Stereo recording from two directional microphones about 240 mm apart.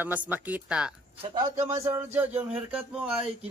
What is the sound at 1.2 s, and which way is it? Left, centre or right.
A man's voice, centre.